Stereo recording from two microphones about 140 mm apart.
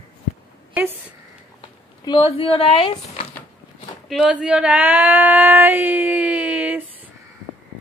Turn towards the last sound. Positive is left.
turn(degrees=-10)  # may be behind; listen again after turning